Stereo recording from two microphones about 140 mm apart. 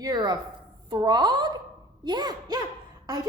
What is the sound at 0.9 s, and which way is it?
Speech, 30° right (ahead or behind).